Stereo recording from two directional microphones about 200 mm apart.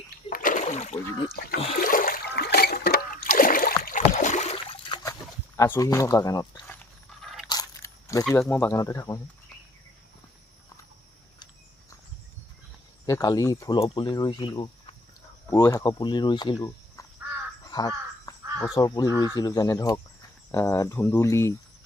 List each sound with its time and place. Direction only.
0.3 s splash: 45° left (ahead or behind)
1.5 s speech: 30° left (ahead or behind)
1.8 s a sound: 45° left (ahead or behind)
4.1 s boat: 35° left (ahead or behind)
5.5 s a sound: 15° left (ahead or behind)
7.4 s a sound: 20° left (ahead or behind)
8.3 s speech: 10° left (ahead or behind)
13.1 s speech: 20° left (ahead or behind)
17.7 s crow: 20° left (ahead or behind)
18.7 s speech: 20° left (ahead or behind)